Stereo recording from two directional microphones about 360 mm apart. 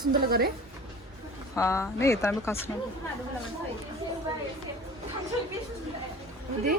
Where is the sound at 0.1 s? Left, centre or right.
Right.